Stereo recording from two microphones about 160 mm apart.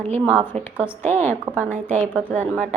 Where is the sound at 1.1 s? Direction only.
45° right (ahead or behind).